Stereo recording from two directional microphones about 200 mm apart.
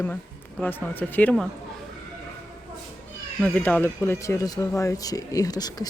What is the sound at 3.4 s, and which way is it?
Speech, 10° left (ahead or behind).